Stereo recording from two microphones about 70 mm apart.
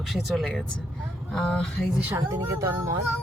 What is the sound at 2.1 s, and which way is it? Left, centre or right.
Speech, right.